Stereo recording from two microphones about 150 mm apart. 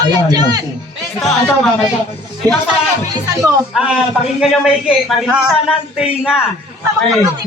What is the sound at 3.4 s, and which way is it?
A man's voice, 5° right (ahead or behind).